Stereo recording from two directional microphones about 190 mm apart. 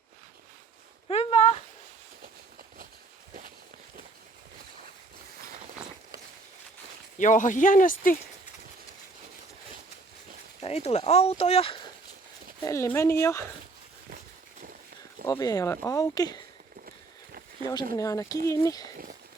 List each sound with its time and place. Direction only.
1.0 s a sound: 35° left (ahead or behind)
7.2 s speech: 40° left (ahead or behind)
10.6 s speech: 35° left (ahead or behind)
12.6 s speech: 15° left (ahead or behind)
15.3 s speech: 20° left (ahead or behind)
17.9 s speech: 15° left (ahead or behind)